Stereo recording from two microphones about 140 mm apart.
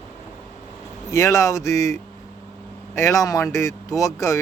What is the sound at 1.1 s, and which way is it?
Speech, 25° left (ahead or behind).